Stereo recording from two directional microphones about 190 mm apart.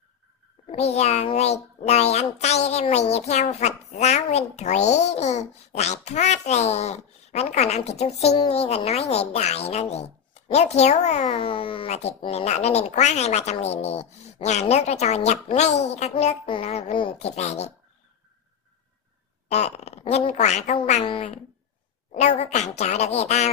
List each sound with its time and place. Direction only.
0.7 s a woman's voice: 35° left (ahead or behind)
19.5 s a woman's voice: 35° left (ahead or behind)
22.4 s a woman's voice: 40° left (ahead or behind)